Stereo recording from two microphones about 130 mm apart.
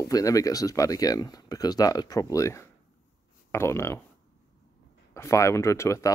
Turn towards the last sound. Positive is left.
turn(degrees=25)  # may be behind; listen again after turning